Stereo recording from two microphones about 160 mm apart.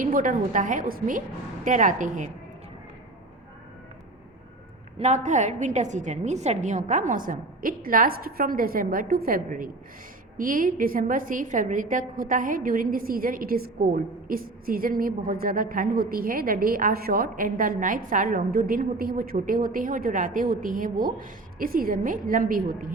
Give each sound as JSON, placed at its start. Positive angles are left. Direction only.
{"t": 0.0, "sound": "a woman's voice", "side_deg": -55}
{"t": 4.9, "sound": "a woman's voice", "side_deg": -45}